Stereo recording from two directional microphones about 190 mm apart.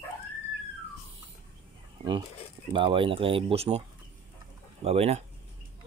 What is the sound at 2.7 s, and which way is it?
Speech, 25° right (ahead or behind).